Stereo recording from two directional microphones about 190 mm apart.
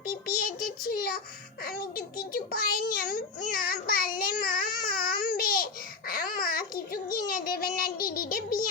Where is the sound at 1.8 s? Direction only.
50° left (ahead or behind).